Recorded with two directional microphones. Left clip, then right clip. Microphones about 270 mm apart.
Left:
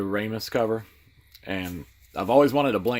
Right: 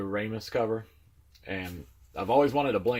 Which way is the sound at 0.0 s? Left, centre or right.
Left.